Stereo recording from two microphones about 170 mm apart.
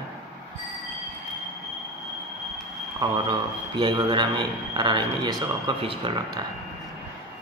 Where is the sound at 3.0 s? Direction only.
25° right (ahead or behind).